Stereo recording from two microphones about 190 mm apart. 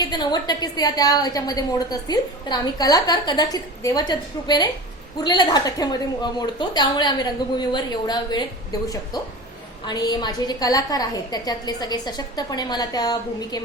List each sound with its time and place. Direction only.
0.0 s a woman's voice: 20° left (ahead or behind)
9.8 s a woman's voice: 20° left (ahead or behind)